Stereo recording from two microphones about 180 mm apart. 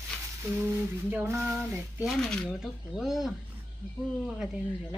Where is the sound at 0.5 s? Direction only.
15° right (ahead or behind).